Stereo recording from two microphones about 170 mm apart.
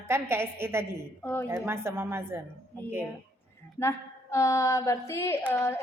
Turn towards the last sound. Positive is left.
turn(degrees=15)  # may be behind; listen again after turning